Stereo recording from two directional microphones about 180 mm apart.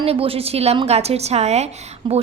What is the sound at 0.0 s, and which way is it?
A woman's voice, 30° right (ahead or behind).